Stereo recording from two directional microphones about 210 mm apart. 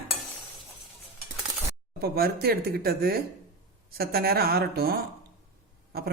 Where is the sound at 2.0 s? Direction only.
45° right (ahead or behind).